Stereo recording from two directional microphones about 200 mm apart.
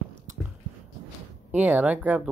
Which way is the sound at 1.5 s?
10° right (ahead or behind).